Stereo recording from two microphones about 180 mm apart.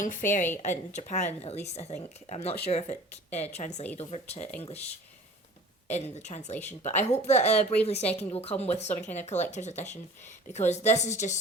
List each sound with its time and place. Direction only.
0.0 s a woman's voice: 45° left (ahead or behind)
5.9 s speech: 40° left (ahead or behind)